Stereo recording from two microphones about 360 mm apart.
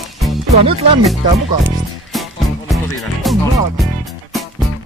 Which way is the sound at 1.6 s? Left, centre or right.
Centre.